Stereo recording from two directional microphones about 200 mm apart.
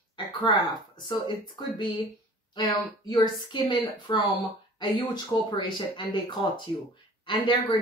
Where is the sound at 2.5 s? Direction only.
20° left (ahead or behind).